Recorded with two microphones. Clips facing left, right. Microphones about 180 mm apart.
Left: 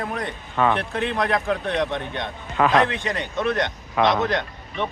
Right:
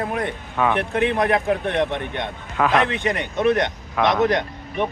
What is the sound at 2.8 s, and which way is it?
A man's voice, 20° right (ahead or behind).